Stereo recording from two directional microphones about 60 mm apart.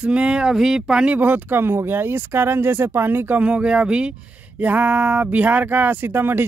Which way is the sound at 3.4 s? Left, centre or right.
Centre.